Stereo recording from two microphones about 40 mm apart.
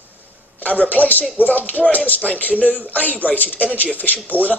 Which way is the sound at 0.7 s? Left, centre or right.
Left.